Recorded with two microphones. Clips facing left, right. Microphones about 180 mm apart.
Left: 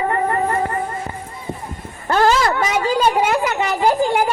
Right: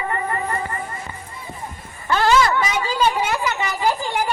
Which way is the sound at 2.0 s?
45° left (ahead or behind).